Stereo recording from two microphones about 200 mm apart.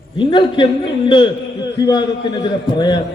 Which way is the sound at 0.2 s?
25° left (ahead or behind).